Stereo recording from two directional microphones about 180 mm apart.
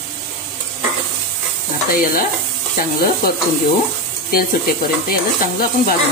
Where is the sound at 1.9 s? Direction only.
50° left (ahead or behind).